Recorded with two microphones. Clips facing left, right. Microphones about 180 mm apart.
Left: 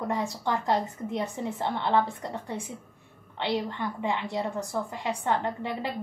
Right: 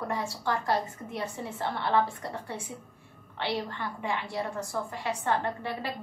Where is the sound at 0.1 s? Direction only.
20° left (ahead or behind).